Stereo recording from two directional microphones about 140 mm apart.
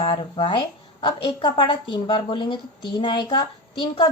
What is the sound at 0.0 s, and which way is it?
A woman's voice, 35° left (ahead or behind).